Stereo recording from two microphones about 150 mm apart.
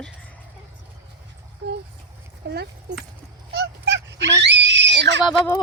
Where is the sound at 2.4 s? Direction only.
90° right.